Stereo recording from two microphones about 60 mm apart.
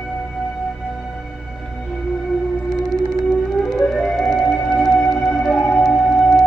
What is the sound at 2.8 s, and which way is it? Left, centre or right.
Music, centre.